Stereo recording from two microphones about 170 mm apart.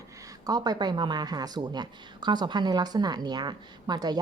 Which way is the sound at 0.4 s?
25° right (ahead or behind).